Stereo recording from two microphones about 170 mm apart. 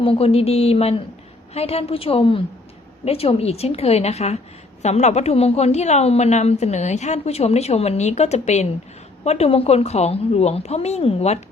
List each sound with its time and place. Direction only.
0.0 s a woman's voice: 35° left (ahead or behind)